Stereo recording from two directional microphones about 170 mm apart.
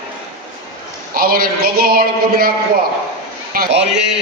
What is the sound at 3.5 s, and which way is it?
Speech, 75° right (ahead or behind).